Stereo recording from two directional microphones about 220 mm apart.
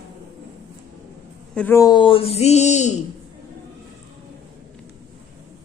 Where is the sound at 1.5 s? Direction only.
10° left (ahead or behind); by 2.9 s 30° left (ahead or behind).